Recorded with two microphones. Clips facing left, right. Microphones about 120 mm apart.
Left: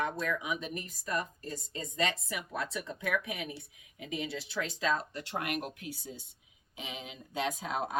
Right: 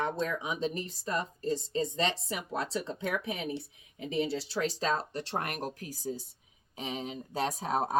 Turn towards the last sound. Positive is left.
turn(degrees=-35)  # may be behind; listen again after turning